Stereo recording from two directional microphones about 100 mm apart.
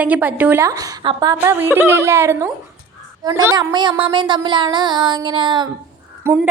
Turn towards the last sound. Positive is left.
turn(degrees=-25)  # may be behind; listen again after turning